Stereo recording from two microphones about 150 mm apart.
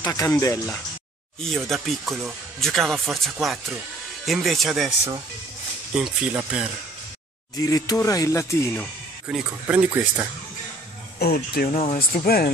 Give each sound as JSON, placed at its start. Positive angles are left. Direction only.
{"t": 0.0, "sound": "speech", "side_deg": 25}
{"t": 1.4, "sound": "speech", "side_deg": 0}
{"t": 5.9, "sound": "speech", "side_deg": -5}
{"t": 7.6, "sound": "speech", "side_deg": 25}
{"t": 9.3, "sound": "speech", "side_deg": -10}
{"t": 11.1, "sound": "speech", "side_deg": 90}
{"t": 11.7, "sound": "speech", "side_deg": 45}
{"t": 12.0, "sound": "speech", "side_deg": 85}